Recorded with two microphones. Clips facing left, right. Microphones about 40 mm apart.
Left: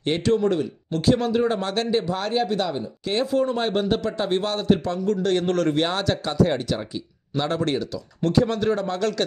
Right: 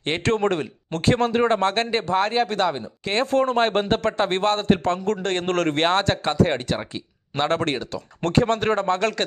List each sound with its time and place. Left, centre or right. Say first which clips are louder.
0.0 s speech: left 1 dB; right
0.3 s speech: even; right